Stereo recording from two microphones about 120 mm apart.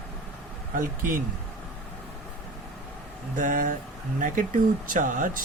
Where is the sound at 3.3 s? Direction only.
90° right.